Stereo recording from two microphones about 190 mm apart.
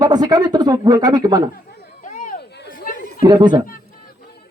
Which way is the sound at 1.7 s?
45° left (ahead or behind).